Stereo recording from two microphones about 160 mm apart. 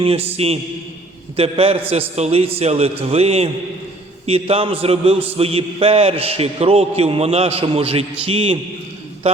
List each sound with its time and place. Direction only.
0.0 s a man's voice: 35° right (ahead or behind)